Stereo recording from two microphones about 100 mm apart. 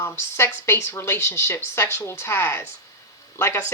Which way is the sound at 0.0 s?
25° left (ahead or behind).